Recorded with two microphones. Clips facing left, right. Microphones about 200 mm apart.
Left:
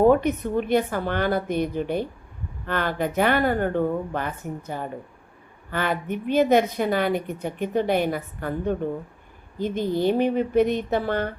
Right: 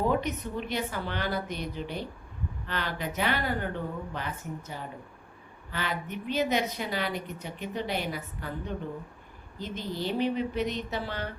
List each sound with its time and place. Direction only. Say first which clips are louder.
0.0 s a woman's voice: left 10 dB; 55° left (ahead or behind)